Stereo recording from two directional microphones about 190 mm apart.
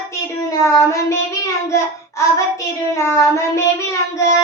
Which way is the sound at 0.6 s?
15° left (ahead or behind).